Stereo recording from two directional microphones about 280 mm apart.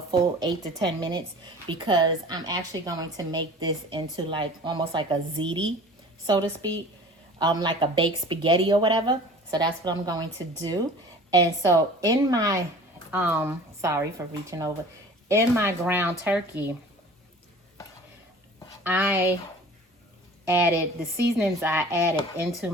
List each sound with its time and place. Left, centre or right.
0.3 s a woman's voice: centre
11.3 s a woman's voice: centre
18.8 s speech: centre
20.5 s a woman's voice: centre